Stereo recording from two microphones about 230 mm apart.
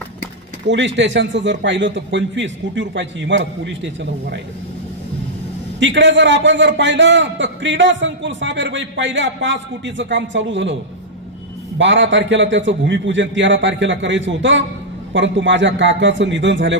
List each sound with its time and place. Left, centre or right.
0.7 s a man's voice: right
5.8 s a man's voice: right
11.8 s a man's voice: right